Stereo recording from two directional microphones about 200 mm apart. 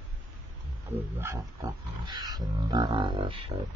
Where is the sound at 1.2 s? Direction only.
15° right (ahead or behind).